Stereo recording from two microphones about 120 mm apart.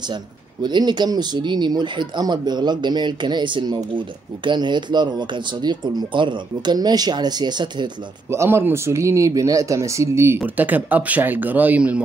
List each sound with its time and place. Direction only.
0.1 s speech: 35° right (ahead or behind)
8.3 s speech: 20° right (ahead or behind)